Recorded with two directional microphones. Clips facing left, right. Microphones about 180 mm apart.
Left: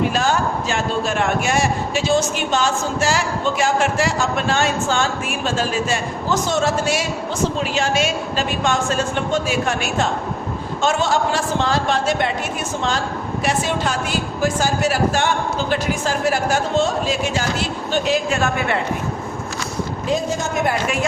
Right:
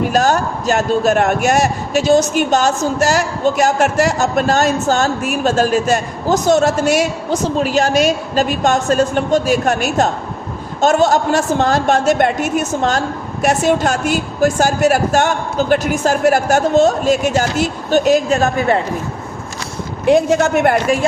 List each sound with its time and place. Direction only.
0.1 s a man's voice: 40° right (ahead or behind)
20.1 s a man's voice: 70° right (ahead or behind)